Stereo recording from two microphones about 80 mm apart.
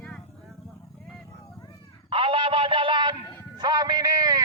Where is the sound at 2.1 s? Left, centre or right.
Right.